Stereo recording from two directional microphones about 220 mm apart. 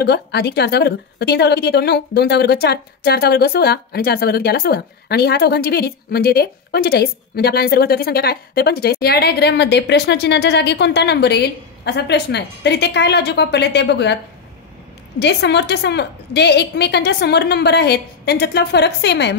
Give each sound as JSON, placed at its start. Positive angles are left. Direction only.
{"t": 0.0, "sound": "a woman's voice", "side_deg": 50}
{"t": 15.1, "sound": "a woman's voice", "side_deg": 50}